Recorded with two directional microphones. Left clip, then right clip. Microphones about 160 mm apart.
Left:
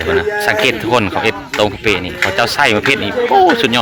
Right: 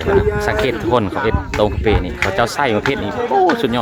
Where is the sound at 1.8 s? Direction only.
25° right (ahead or behind).